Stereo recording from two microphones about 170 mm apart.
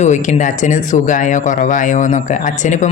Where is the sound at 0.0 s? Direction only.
45° left (ahead or behind).